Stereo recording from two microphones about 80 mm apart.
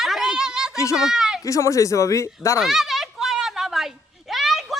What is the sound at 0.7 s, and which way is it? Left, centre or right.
Speech, left.